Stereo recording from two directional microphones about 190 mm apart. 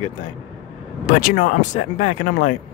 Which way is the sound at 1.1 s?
45° left (ahead or behind).